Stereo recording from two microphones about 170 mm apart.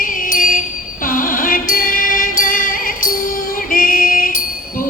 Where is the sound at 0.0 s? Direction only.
55° left (ahead or behind).